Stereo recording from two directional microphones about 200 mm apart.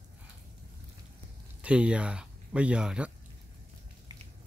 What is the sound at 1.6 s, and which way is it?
Speech, 5° right (ahead or behind).